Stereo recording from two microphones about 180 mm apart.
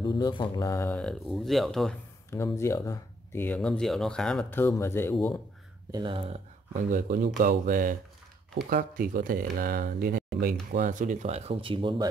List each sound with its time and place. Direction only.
0.0 s speech: 25° left (ahead or behind); by 2.0 s centre (ahead or behind)
2.3 s speech: 15° left (ahead or behind)
5.9 s speech: 25° right (ahead or behind)
6.9 s speech: 50° right (ahead or behind); by 12.1 s 25° right (ahead or behind)